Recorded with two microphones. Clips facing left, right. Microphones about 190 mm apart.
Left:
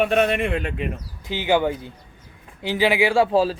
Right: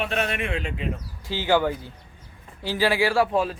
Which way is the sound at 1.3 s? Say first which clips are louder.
Left 2 dB; 20° left (ahead or behind).